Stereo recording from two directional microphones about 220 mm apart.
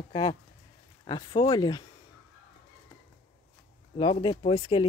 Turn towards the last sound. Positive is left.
turn(degrees=25)  # may be behind; listen again after turning